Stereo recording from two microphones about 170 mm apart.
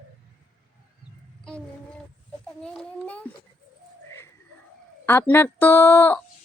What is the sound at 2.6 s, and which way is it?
Speech, 5° left (ahead or behind).